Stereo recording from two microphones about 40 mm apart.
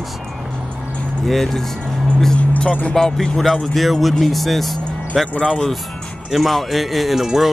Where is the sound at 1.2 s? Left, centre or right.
Centre.